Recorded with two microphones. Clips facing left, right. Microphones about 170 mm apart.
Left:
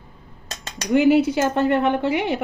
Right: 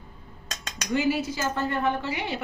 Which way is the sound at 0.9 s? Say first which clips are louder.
Left 10 dB; 65° left (ahead or behind).